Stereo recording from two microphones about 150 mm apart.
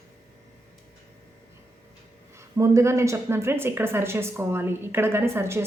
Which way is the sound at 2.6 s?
20° right (ahead or behind).